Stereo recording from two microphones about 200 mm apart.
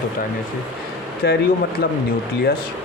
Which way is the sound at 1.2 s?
55° left (ahead or behind).